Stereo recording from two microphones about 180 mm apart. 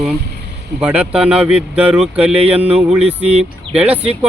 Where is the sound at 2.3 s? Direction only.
35° right (ahead or behind).